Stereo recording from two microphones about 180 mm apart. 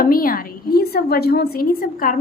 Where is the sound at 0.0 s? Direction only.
55° left (ahead or behind).